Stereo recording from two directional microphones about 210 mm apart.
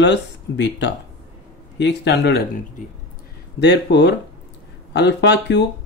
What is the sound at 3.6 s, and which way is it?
Speech, 55° left (ahead or behind).